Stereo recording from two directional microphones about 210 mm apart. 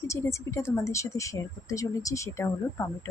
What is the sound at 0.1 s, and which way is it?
Speech, 15° left (ahead or behind).